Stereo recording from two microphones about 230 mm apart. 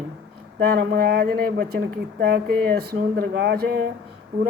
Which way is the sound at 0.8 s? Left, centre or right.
Right.